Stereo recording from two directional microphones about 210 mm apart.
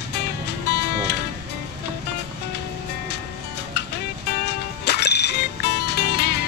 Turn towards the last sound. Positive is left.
turn(degrees=50)  # may be behind; listen again after turning